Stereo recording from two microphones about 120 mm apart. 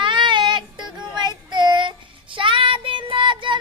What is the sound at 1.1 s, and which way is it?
Child singing, 35° right (ahead or behind).